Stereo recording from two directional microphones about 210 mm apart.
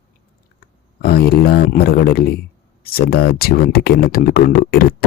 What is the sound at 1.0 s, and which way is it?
Speech, 50° left (ahead or behind).